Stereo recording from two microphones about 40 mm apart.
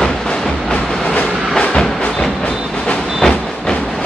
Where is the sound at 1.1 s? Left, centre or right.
Left.